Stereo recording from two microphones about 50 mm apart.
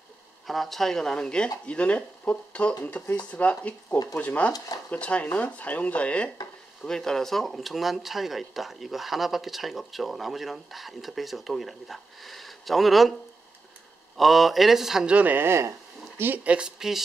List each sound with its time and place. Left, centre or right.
0.5 s speech: centre; by 6.3 s left
6.8 s speech: centre
14.1 s speech: centre
15.0 s speech: right
15.3 s speech: right
16.4 s speech: centre